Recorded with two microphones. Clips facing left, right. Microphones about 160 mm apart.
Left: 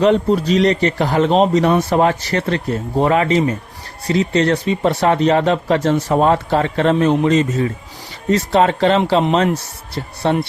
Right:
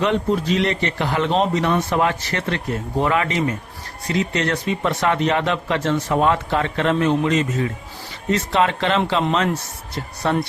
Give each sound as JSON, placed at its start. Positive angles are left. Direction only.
{"t": 0.0, "sound": "speech", "side_deg": 35}
{"t": 10.2, "sound": "speech", "side_deg": 30}